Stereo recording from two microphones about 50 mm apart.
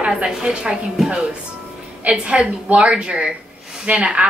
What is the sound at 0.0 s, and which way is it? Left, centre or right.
Speech, right.